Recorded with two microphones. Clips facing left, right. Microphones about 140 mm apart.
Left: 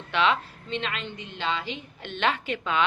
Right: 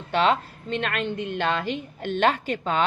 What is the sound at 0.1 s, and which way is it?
A woman's voice, 40° right (ahead or behind).